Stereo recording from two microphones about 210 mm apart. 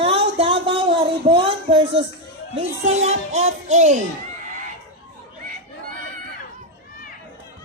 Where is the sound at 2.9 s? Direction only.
35° right (ahead or behind).